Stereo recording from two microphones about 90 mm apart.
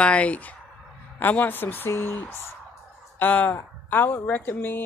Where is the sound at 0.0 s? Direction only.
15° left (ahead or behind).